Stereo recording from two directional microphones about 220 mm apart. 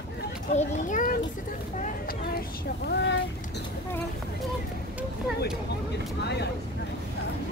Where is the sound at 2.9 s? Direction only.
50° left (ahead or behind).